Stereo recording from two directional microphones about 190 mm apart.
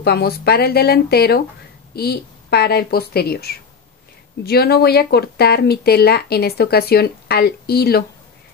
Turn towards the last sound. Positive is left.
turn(degrees=55)  # may be behind; listen again after turning